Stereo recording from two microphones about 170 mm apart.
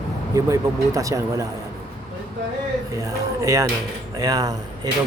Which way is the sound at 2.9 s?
20° right (ahead or behind).